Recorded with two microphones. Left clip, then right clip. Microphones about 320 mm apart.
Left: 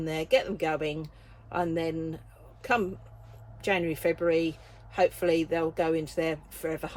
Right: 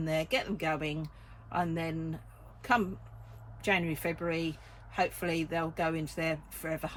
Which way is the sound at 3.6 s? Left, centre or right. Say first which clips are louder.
Left 4 dB; centre.